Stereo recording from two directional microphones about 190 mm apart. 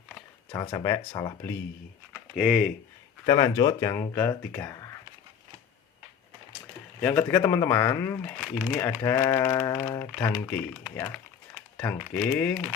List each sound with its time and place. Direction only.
0.5 s speech: 20° left (ahead or behind)
2.3 s speech: centre (ahead or behind)
3.2 s speech: 20° left (ahead or behind)
7.0 s speech: 10° left (ahead or behind)